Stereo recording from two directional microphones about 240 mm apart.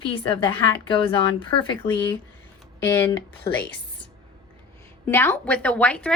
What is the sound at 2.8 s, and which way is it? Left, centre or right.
Speech, centre.